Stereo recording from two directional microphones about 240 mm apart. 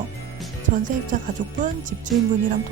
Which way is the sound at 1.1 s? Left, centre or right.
Right.